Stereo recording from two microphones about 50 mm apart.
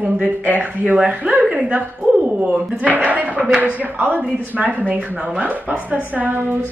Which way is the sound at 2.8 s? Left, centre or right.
Right.